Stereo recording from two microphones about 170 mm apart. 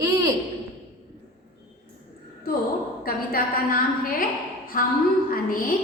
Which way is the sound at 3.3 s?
60° left (ahead or behind).